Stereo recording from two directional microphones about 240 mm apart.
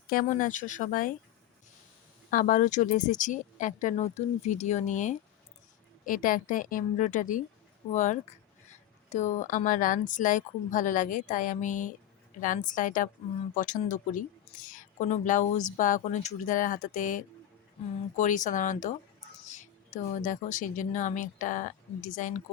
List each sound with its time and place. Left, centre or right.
0.1 s a woman's voice: left
2.3 s a woman's voice: left
20.1 s a woman's voice: left